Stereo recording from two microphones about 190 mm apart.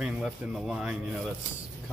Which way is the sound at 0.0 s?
5° right (ahead or behind).